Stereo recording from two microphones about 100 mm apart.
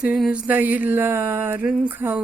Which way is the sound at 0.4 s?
15° right (ahead or behind).